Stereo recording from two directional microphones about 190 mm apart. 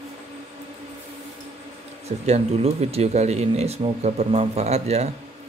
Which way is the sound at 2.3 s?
35° right (ahead or behind).